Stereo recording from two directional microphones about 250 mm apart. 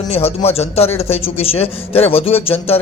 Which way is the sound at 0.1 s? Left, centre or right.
Left.